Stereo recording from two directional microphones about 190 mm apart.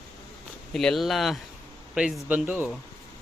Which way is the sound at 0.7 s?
Centre (ahead or behind).